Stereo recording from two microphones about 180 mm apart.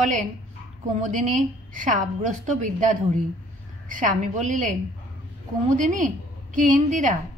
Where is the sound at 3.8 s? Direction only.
45° right (ahead or behind).